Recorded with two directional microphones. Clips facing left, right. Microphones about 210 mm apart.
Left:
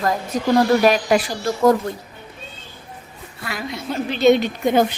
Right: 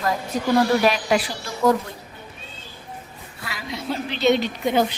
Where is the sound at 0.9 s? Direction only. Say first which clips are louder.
Left 4 dB; 50° left (ahead or behind).